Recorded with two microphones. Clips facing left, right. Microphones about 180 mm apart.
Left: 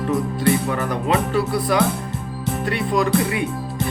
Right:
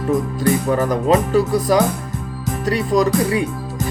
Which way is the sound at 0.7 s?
35° right (ahead or behind).